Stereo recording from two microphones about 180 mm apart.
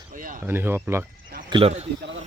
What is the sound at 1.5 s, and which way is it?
Speech, 30° right (ahead or behind).